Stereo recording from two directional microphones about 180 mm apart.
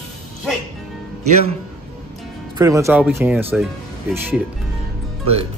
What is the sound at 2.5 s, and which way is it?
Speech, 15° right (ahead or behind).